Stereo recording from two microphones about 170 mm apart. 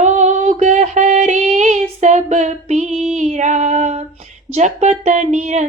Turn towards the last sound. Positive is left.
turn(degrees=-45)  # may be behind; listen again after turning